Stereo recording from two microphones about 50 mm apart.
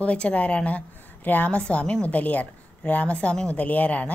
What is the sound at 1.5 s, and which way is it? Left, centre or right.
A woman's voice, left.